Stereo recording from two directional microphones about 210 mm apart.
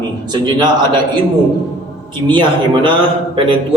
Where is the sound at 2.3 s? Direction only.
25° right (ahead or behind).